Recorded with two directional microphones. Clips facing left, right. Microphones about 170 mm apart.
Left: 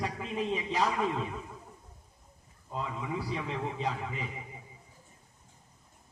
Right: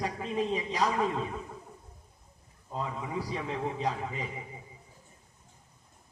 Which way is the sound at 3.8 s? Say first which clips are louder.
Right 2 dB; 40° right (ahead or behind).